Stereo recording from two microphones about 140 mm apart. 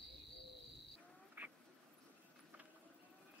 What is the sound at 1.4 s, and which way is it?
Duck, 15° right (ahead or behind).